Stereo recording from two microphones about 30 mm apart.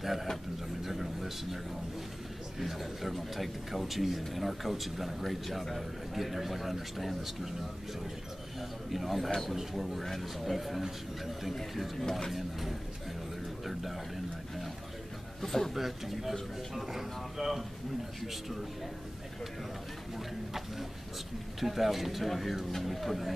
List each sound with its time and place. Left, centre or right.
0.0 s speech: centre
0.8 s a sound: centre
2.6 s speech: centre
8.5 s a sound: centre
9.5 s speech: centre
13.7 s a sound: centre
15.4 s a man's voice: centre
15.7 s speech: centre
21.5 s speech: centre